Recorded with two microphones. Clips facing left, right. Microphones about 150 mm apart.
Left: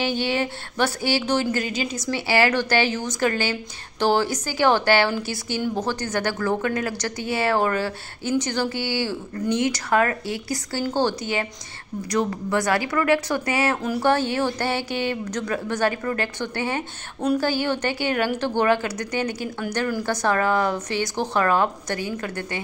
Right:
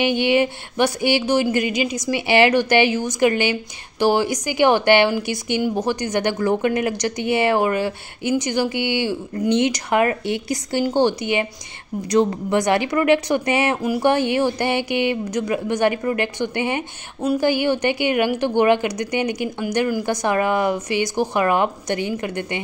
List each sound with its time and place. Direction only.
0.0 s a woman's voice: 15° right (ahead or behind)